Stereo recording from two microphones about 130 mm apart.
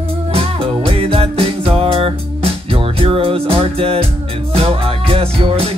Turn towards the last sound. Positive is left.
turn(degrees=-50)  # may be behind; listen again after turning